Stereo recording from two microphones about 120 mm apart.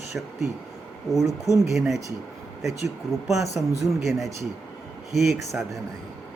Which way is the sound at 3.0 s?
Centre (ahead or behind).